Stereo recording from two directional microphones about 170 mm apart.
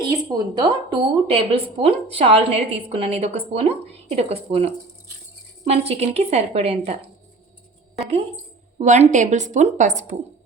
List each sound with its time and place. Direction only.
0.3 s a woman's voice: 25° right (ahead or behind)
8.8 s a woman's voice: 45° right (ahead or behind)